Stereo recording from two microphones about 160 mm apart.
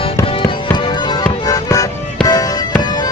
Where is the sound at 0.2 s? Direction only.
25° left (ahead or behind).